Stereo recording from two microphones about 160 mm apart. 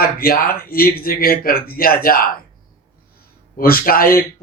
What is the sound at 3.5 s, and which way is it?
Speech, 65° left (ahead or behind).